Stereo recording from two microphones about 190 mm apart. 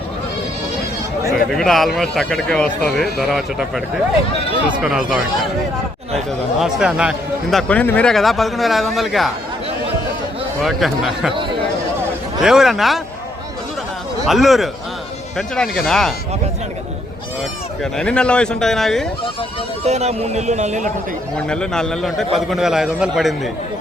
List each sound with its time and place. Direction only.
1.5 s a man's voice: centre (ahead or behind)
6.6 s a man's voice: 5° right (ahead or behind)
7.7 s a man's voice: 5° left (ahead or behind)
10.6 s a man's voice: centre (ahead or behind)
12.4 s a man's voice: centre (ahead or behind)
14.3 s a man's voice: centre (ahead or behind)
17.9 s a man's voice: 5° left (ahead or behind)
19.8 s a man's voice: 35° right (ahead or behind)
21.3 s a man's voice: 5° left (ahead or behind)